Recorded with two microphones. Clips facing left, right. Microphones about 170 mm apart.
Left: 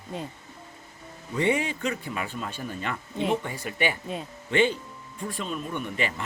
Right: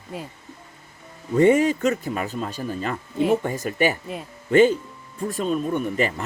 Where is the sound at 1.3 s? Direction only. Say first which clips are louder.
Right 9 dB; 45° right (ahead or behind).